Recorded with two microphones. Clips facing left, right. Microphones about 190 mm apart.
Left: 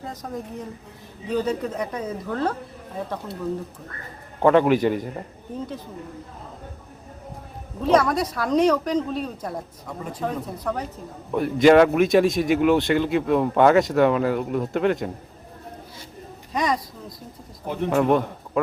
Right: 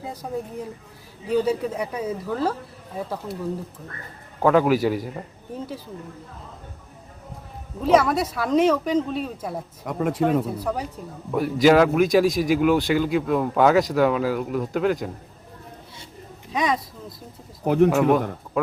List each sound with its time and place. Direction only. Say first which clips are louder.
0.0 s a woman's voice: right 2 dB; 10° right (ahead or behind)
4.4 s a man's voice: left 1 dB; 5° right (ahead or behind)
7.8 s a man's voice: right 1 dB; 5° right (ahead or behind)
9.8 s speech: right 9 dB; 75° right (ahead or behind)
10.6 s a woman's voice: right 1 dB; 10° right (ahead or behind)
16.5 s speech: even; centre (ahead or behind)
17.8 s a man's voice: left 1 dB; 5° right (ahead or behind)